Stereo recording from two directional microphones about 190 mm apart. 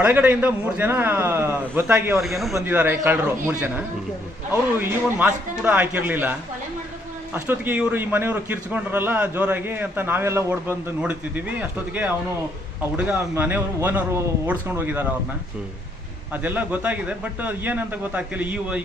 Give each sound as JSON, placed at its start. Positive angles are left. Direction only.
{"t": 0.0, "sound": "a man's voice", "side_deg": -10}
{"t": 2.6, "sound": "a man's voice", "side_deg": -10}
{"t": 7.3, "sound": "a man's voice", "side_deg": -10}
{"t": 13.0, "sound": "a man's voice", "side_deg": -10}
{"t": 16.3, "sound": "a man's voice", "side_deg": -10}